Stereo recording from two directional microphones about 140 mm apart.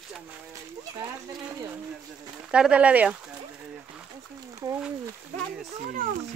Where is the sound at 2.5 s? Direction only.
5° right (ahead or behind).